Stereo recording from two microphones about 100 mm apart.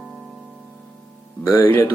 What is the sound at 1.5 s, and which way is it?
Music, 20° left (ahead or behind).